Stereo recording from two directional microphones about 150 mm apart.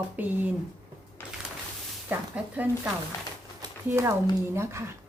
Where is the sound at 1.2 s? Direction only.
15° left (ahead or behind).